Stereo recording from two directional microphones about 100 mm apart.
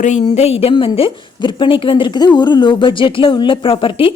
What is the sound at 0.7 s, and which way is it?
A woman's voice, 60° left (ahead or behind).